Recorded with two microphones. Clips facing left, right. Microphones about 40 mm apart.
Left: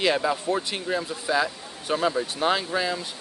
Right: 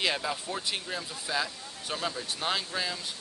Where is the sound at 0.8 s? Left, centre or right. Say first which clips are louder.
Left 9 dB; centre.